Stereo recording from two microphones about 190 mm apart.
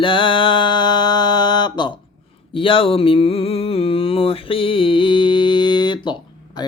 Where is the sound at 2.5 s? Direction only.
30° left (ahead or behind).